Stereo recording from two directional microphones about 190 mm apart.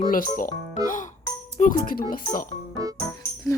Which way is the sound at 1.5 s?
45° left (ahead or behind).